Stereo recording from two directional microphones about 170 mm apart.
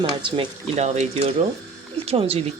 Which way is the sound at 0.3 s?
40° right (ahead or behind).